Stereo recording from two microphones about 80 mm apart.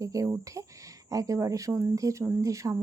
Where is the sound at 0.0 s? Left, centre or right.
Right.